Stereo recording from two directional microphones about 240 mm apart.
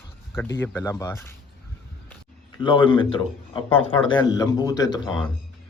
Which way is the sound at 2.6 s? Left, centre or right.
Centre.